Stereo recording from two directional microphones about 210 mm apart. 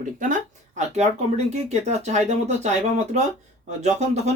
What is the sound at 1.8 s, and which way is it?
Speech, 30° right (ahead or behind).